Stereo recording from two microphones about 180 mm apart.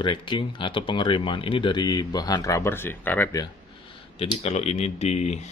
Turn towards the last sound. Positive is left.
turn(degrees=35)  # may be behind; listen again after turning